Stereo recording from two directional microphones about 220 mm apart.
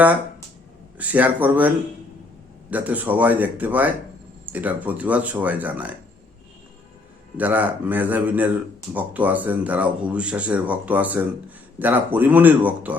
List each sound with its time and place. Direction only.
0.9 s speech: 5° right (ahead or behind)
7.3 s speech: 5° right (ahead or behind)